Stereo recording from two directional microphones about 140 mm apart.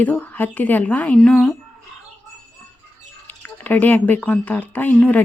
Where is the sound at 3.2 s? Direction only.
10° left (ahead or behind).